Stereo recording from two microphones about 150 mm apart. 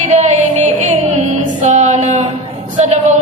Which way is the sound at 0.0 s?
50° right (ahead or behind).